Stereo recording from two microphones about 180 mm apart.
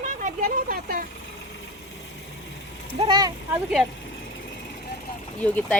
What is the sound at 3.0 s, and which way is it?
Speech, 25° right (ahead or behind).